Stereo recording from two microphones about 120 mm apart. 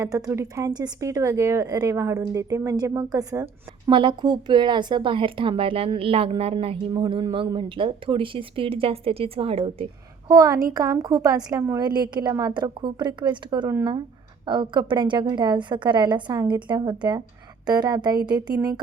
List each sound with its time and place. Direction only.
0.0 s speech: 25° right (ahead or behind)
3.8 s a woman's voice: 45° right (ahead or behind)
10.2 s a woman's voice: 30° right (ahead or behind)